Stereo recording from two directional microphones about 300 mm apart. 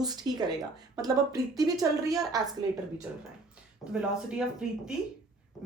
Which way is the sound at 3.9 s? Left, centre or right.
Centre.